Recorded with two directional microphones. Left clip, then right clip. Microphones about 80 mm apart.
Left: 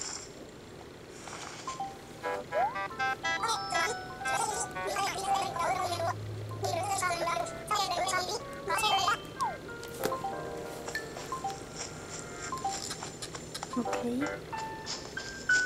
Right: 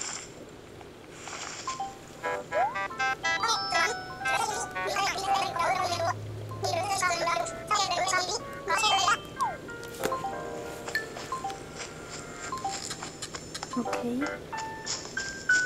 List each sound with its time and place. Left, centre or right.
2.2 s music: centre
12.4 s a sound: centre
13.8 s music: centre